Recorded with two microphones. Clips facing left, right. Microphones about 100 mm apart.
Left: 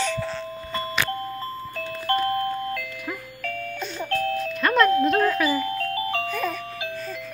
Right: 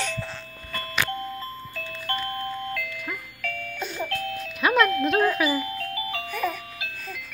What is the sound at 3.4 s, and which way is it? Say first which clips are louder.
Music: left 3 dB; 35° left (ahead or behind).